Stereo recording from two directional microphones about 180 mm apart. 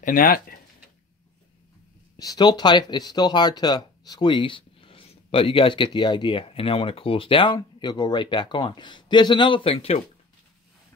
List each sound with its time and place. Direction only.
0.0 s speech: 50° left (ahead or behind)
2.1 s speech: 20° left (ahead or behind)